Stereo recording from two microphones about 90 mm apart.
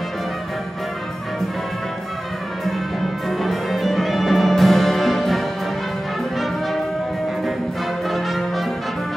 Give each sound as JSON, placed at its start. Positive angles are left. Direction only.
{"t": 3.3, "sound": "music", "side_deg": 0}
{"t": 8.1, "sound": "brass instrument", "side_deg": 0}